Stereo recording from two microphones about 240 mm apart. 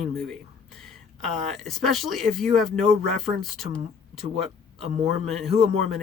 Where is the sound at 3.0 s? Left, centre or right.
Left.